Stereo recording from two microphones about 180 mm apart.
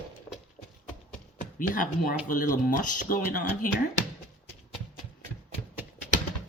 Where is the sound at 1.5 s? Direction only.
50° left (ahead or behind).